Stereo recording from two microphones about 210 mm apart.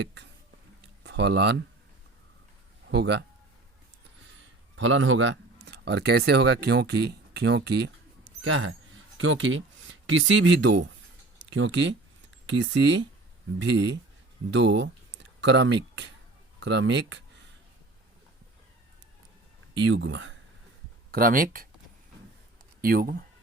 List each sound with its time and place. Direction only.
0.0 s a sound: 55° right (ahead or behind)
1.0 s speech: 55° right (ahead or behind)
2.8 s speech: 55° right (ahead or behind)
4.8 s speech: 65° right (ahead or behind)
8.4 s speech: 70° right (ahead or behind)
19.8 s speech: 60° right (ahead or behind)
21.1 s speech: 40° right (ahead or behind)
22.8 s speech: 45° right (ahead or behind)